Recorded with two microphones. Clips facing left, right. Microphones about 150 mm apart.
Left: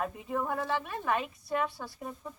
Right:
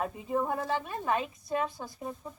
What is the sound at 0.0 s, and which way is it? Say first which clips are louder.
Speech: right 2 dB; 25° right (ahead or behind).